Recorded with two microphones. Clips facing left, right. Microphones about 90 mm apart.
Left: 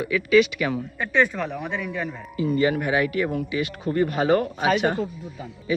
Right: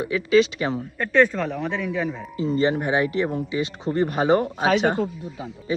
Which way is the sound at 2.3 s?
30° right (ahead or behind).